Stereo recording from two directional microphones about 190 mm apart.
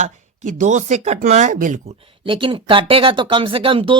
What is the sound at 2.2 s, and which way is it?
Speech, 25° right (ahead or behind).